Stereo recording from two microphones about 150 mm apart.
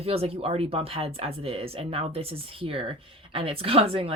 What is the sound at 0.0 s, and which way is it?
Speech, 40° right (ahead or behind).